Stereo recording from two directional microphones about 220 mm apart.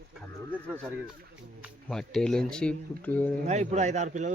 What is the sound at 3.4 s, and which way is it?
Speech, 30° right (ahead or behind).